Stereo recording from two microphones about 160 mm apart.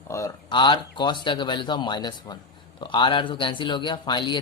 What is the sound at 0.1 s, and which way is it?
Speech, 20° left (ahead or behind).